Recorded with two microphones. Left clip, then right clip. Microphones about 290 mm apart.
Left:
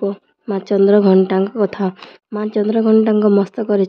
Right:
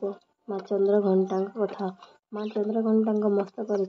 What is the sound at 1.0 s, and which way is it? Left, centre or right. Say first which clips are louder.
Speech: left 11 dB; left.